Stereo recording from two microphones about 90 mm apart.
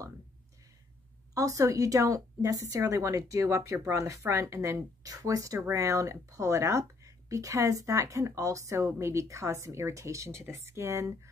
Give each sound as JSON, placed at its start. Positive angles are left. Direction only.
{"t": 1.3, "sound": "a woman's voice", "side_deg": -40}